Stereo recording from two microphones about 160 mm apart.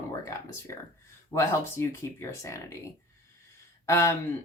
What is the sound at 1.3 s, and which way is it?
A woman's voice, 15° left (ahead or behind).